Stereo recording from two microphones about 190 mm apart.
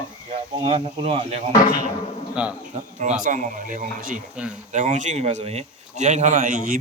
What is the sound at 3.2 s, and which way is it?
Speech, 45° right (ahead or behind).